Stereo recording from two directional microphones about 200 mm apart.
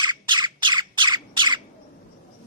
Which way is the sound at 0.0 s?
20° right (ahead or behind).